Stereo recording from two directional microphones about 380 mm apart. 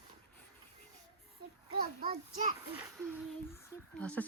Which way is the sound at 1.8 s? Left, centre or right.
Right.